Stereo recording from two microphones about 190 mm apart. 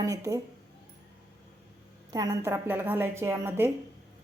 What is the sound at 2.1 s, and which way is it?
A woman's voice, 20° right (ahead or behind).